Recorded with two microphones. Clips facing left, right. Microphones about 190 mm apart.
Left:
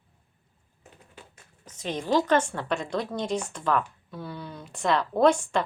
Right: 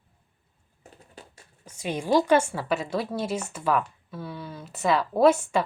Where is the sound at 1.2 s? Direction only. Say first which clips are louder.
Right 3 dB; 40° right (ahead or behind).